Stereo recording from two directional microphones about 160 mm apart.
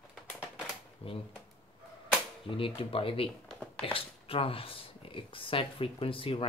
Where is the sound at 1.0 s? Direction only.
35° left (ahead or behind).